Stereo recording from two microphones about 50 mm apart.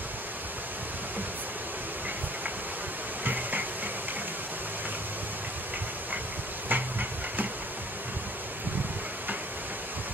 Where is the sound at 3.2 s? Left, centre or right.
Right.